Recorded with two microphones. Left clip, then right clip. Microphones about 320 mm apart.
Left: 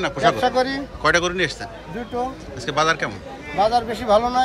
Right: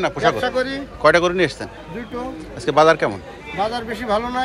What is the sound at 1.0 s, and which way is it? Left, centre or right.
Speech, centre.